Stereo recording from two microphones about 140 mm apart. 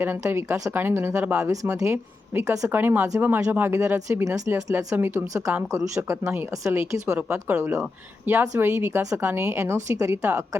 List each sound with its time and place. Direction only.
0.0 s a woman's voice: 15° right (ahead or behind)
1.5 s a woman's voice: 20° right (ahead or behind)
7.2 s a woman's voice: 10° right (ahead or behind)